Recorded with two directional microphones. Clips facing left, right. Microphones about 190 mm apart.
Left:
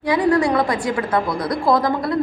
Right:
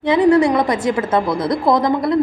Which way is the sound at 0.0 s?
20° right (ahead or behind).